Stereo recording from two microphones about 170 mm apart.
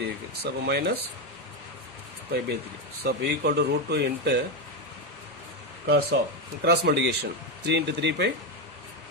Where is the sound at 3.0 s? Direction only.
75° right (ahead or behind).